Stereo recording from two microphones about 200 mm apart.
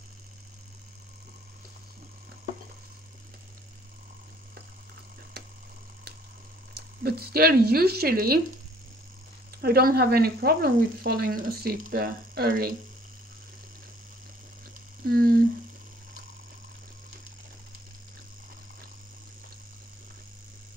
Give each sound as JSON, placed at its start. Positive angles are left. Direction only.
{"t": 6.7, "sound": "speech", "side_deg": -50}
{"t": 9.6, "sound": "speech", "side_deg": -50}
{"t": 15.0, "sound": "speech", "side_deg": -45}